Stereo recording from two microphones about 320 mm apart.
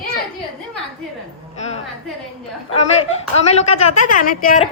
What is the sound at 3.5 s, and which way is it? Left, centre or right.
A woman's voice, left.